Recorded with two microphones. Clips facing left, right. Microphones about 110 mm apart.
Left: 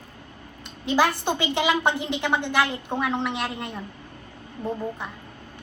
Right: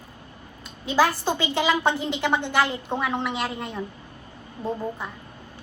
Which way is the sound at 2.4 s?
15° right (ahead or behind).